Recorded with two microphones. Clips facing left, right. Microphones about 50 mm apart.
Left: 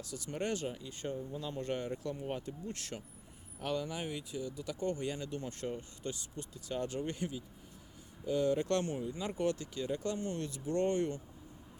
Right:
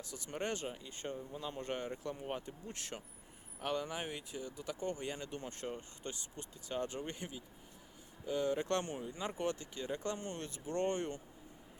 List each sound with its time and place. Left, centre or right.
0.0 s speech: right